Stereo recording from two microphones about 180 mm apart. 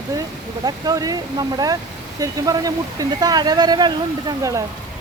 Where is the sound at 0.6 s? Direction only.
20° right (ahead or behind).